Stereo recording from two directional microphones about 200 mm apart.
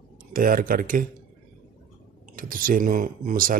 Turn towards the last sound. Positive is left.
turn(degrees=-45)  # may be behind; listen again after turning